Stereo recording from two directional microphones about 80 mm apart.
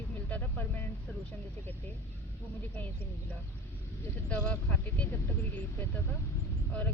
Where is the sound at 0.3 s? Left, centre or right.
Centre.